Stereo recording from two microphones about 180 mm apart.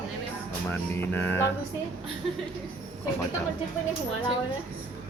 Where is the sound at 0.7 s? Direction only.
10° left (ahead or behind).